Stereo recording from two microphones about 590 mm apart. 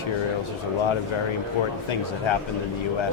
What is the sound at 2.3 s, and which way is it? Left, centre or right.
Speech, left.